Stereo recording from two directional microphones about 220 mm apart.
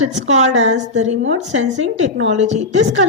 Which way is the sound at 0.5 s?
60° right (ahead or behind).